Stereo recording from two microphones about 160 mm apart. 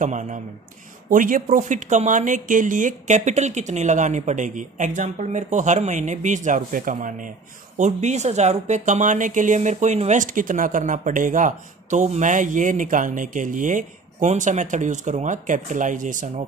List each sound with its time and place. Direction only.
0.0 s speech: 50° right (ahead or behind)